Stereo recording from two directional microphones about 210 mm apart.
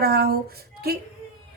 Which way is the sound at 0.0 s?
45° right (ahead or behind).